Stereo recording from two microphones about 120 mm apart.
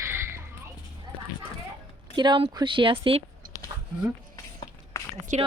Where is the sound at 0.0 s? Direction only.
20° right (ahead or behind).